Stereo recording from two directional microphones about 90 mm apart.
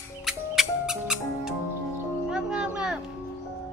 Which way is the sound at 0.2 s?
5° right (ahead or behind).